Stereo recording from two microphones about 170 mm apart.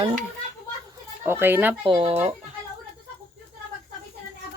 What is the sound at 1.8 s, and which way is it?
Speech, 30° right (ahead or behind).